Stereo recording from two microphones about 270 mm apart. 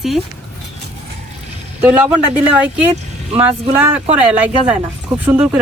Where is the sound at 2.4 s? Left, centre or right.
Centre.